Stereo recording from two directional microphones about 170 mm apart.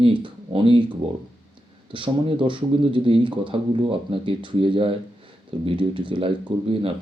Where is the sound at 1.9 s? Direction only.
30° right (ahead or behind).